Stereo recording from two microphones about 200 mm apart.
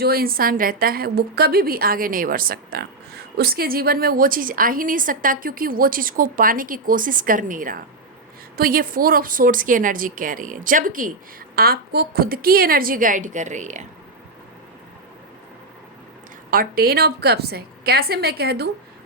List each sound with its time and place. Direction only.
0.0 s a woman's voice: 50° right (ahead or behind)
16.5 s a woman's voice: 45° right (ahead or behind)